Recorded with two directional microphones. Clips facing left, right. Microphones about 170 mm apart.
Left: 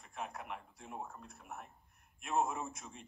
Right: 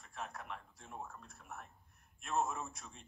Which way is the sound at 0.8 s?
15° left (ahead or behind).